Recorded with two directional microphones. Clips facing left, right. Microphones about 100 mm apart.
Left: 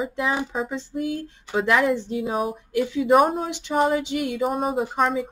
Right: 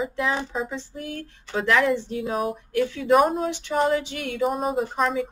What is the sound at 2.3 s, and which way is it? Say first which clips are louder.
Speech: even; 5° left (ahead or behind).